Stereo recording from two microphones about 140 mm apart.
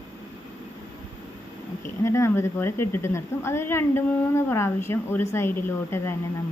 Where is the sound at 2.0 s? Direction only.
20° left (ahead or behind).